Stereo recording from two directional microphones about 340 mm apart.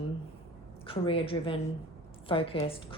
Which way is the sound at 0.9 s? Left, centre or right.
Centre.